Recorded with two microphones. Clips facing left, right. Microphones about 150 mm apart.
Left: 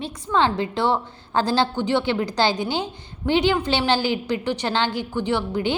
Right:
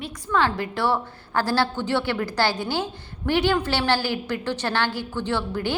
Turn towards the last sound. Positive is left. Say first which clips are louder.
# left 3 dB
turn(degrees=15)  # may be behind; listen again after turning